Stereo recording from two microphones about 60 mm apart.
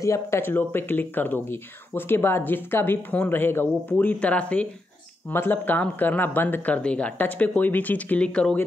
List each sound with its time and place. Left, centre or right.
0.0 s speech: left
0.4 s speech: left
5.3 s speech: left; by 7.1 s centre
7.2 s speech: left